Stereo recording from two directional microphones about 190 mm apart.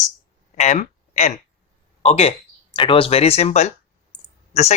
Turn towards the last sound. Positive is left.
turn(degrees=35)  # may be behind; listen again after turning